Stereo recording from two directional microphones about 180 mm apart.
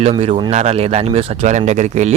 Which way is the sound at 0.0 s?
30° right (ahead or behind).